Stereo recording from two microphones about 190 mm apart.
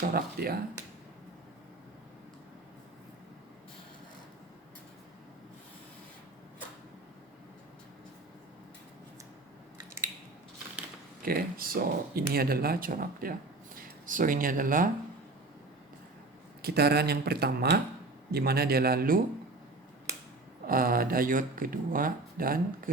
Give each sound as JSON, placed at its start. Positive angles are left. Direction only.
{"t": 0.0, "sound": "speech", "side_deg": -50}
{"t": 11.2, "sound": "speech", "side_deg": -50}
{"t": 16.6, "sound": "speech", "side_deg": -60}
{"t": 20.7, "sound": "speech", "side_deg": -50}